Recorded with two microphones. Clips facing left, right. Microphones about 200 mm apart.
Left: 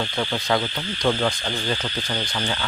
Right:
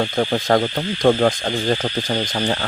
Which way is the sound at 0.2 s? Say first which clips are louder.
Right 6 dB; 45° right (ahead or behind).